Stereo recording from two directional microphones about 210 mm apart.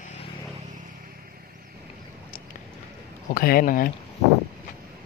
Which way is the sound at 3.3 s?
45° left (ahead or behind).